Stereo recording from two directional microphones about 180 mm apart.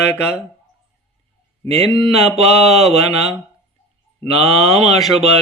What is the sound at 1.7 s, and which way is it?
Speech, 35° right (ahead or behind).